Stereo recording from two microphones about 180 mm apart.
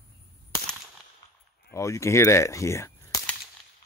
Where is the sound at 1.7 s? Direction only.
15° left (ahead or behind).